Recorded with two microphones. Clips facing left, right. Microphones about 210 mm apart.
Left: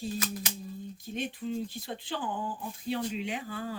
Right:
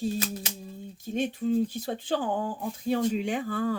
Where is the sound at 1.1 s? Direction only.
45° right (ahead or behind).